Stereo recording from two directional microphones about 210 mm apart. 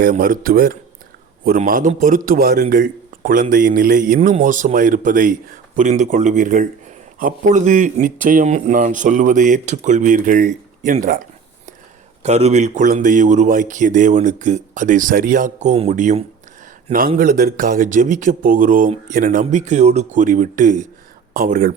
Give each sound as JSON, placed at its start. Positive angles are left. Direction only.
{"t": 0.0, "sound": "a man's voice", "side_deg": -40}
{"t": 12.2, "sound": "a man's voice", "side_deg": -30}